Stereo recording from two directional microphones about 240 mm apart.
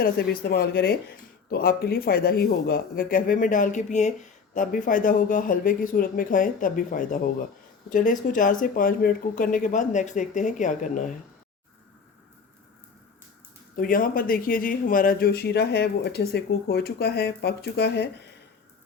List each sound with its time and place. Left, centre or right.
0.0 s a man's voice: left
13.7 s a man's voice: left